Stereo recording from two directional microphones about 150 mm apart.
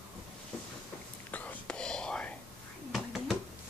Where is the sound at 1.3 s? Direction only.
10° left (ahead or behind).